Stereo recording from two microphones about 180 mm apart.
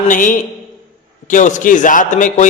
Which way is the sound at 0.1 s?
45° left (ahead or behind).